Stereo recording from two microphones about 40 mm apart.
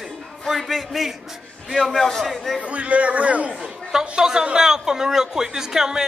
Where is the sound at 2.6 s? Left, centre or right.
Right.